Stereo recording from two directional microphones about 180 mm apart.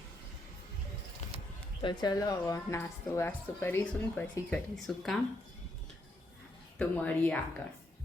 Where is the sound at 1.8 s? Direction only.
25° left (ahead or behind); by 5.1 s 5° left (ahead or behind).